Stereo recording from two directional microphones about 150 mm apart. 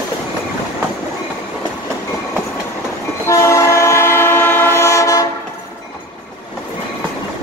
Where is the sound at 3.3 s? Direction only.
20° left (ahead or behind).